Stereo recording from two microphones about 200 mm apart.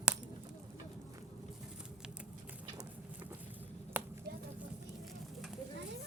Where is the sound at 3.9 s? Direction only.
10° right (ahead or behind).